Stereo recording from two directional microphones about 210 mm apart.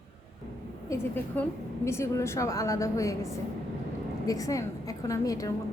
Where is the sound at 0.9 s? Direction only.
10° left (ahead or behind).